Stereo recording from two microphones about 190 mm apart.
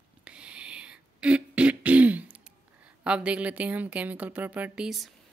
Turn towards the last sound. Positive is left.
turn(degrees=-5)  # may be behind; listen again after turning